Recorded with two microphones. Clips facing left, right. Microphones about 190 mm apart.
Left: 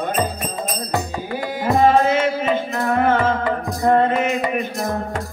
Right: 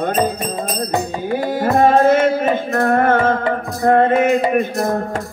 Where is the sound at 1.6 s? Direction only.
50° right (ahead or behind).